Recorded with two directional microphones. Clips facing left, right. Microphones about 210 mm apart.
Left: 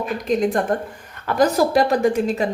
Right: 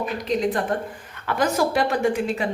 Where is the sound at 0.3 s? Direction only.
45° left (ahead or behind).